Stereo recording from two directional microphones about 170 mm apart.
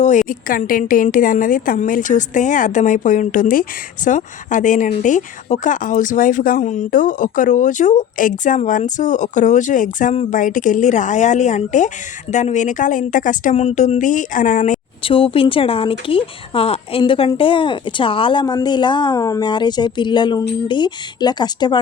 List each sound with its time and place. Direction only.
0.0 s speech: 45° left (ahead or behind)
15.0 s speech: 30° left (ahead or behind)